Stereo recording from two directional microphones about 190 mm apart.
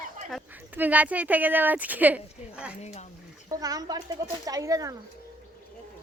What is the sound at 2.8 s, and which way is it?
Speech, 35° left (ahead or behind).